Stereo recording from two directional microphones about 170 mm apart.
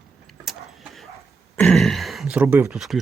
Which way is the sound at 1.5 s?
5° left (ahead or behind).